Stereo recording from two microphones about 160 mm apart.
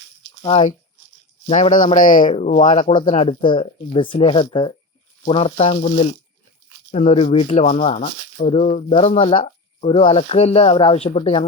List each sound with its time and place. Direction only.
0.4 s speech: 40° left (ahead or behind)
2.8 s speech: 30° left (ahead or behind)